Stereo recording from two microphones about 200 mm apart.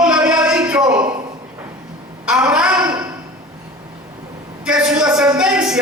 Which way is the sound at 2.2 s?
5° right (ahead or behind).